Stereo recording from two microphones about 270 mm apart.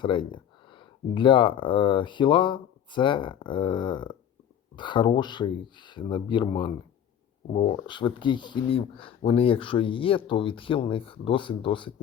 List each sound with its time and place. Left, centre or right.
0.0 s speech: centre